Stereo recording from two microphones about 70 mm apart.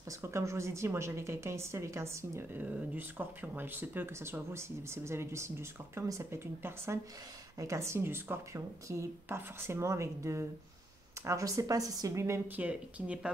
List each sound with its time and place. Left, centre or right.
0.2 s a woman's voice: right
2.5 s a woman's voice: right
6.4 s speech: right
7.5 s speech: right
8.8 s a woman's voice: right
12.4 s speech: right